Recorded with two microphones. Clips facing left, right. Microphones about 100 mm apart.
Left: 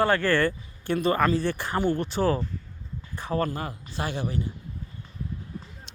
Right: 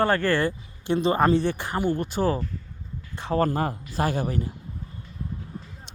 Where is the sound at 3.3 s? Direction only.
45° right (ahead or behind).